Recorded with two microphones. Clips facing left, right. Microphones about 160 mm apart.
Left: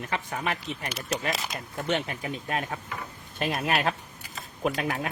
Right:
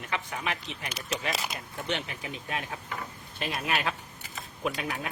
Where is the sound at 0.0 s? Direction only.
45° left (ahead or behind).